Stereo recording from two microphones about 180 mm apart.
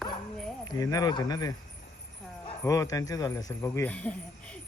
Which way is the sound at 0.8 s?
20° left (ahead or behind).